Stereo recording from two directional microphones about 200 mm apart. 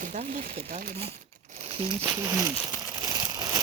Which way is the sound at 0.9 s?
30° right (ahead or behind).